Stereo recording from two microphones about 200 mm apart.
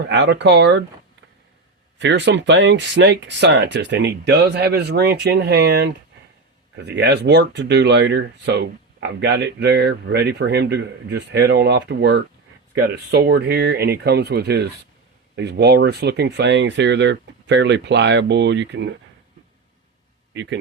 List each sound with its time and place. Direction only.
0.1 s speech: 60° right (ahead or behind)
2.0 s speech: 60° right (ahead or behind)
20.3 s a man's voice: 60° right (ahead or behind)